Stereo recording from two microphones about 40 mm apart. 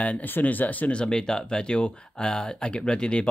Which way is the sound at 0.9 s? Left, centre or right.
Left.